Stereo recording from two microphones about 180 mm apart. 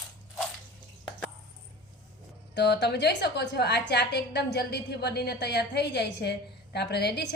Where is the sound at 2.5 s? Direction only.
70° left (ahead or behind).